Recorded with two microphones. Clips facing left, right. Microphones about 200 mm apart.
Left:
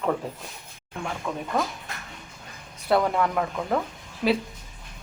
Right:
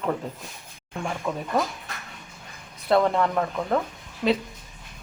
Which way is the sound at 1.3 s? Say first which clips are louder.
Right 2 dB; centre (ahead or behind).